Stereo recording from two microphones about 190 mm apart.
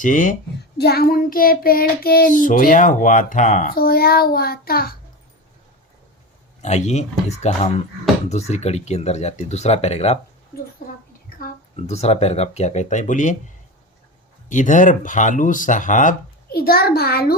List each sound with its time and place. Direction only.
0.0 s child singing: 45° left (ahead or behind)
0.8 s child singing: 55° left (ahead or behind)
6.6 s speech: 35° left (ahead or behind)
11.8 s speech: 35° left (ahead or behind)
14.5 s child singing: 40° left (ahead or behind)